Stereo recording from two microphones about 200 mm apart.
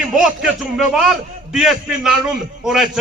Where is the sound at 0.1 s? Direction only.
Centre (ahead or behind).